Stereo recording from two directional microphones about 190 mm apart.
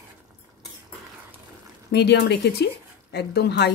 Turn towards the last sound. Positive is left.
turn(degrees=60)  # may be behind; listen again after turning